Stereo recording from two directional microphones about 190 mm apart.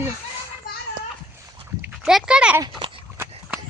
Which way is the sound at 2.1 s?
5° right (ahead or behind).